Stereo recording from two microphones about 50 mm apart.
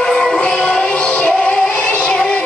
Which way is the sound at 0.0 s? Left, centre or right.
Centre.